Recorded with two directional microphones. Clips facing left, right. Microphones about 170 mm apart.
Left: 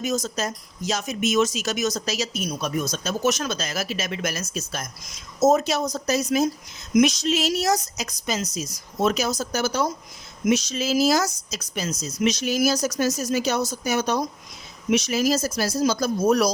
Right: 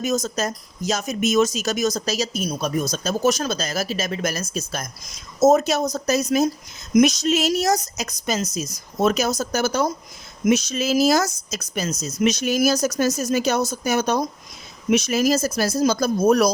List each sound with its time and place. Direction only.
0.0 s speech: 45° right (ahead or behind)